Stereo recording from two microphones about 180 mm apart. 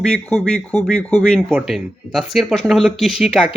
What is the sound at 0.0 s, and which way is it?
Speech, 5° left (ahead or behind).